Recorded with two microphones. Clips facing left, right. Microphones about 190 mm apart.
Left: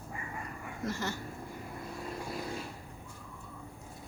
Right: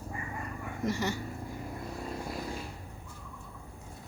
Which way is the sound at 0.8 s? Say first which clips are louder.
Right 4 dB; 15° right (ahead or behind).